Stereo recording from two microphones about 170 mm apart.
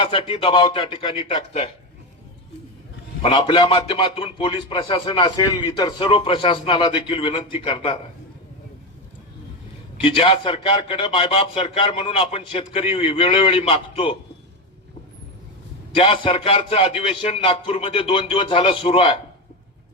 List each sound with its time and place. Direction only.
0.0 s a man's voice: 30° left (ahead or behind)
3.2 s a man's voice: 30° left (ahead or behind)
10.0 s a man's voice: 30° left (ahead or behind)
16.0 s a man's voice: 30° left (ahead or behind)